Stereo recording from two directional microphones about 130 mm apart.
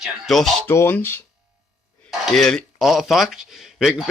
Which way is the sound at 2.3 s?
5° left (ahead or behind).